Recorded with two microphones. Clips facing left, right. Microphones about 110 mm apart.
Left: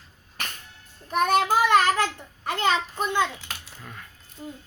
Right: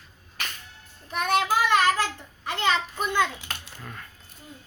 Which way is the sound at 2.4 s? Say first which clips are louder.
Left 1 dB; 40° left (ahead or behind).